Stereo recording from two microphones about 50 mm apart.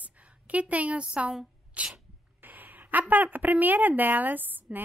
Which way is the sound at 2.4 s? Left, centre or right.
Right.